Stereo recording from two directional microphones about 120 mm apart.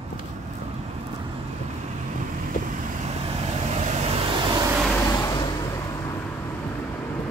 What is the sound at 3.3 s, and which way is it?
Vehicle, 60° right (ahead or behind).